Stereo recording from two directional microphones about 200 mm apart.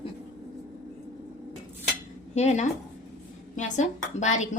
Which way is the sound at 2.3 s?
35° left (ahead or behind).